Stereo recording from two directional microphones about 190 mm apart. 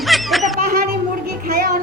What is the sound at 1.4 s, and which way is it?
Music, 50° right (ahead or behind).